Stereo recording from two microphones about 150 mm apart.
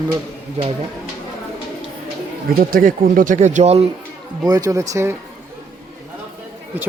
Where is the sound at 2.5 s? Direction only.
75° right (ahead or behind); by 3.9 s 45° right (ahead or behind).